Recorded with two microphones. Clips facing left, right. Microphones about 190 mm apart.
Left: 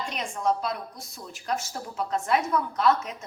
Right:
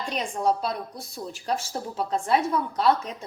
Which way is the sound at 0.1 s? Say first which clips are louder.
Right 3 dB; 35° right (ahead or behind).